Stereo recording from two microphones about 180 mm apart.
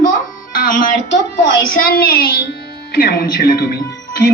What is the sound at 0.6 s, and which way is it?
A child's voice, 50° left (ahead or behind).